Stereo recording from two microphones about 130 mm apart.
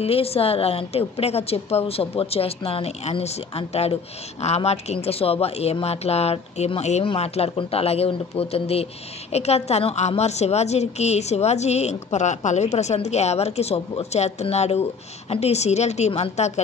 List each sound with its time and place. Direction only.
0.0 s a woman's voice: 50° left (ahead or behind)